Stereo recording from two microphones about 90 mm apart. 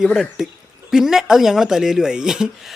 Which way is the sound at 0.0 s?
5° right (ahead or behind).